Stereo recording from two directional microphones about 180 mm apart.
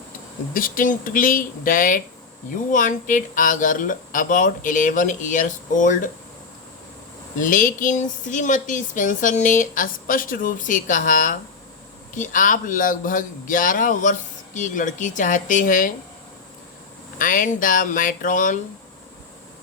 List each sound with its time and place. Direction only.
0.5 s speech: 50° left (ahead or behind)
7.3 s speech: 50° left (ahead or behind)
17.2 s speech: 50° left (ahead or behind)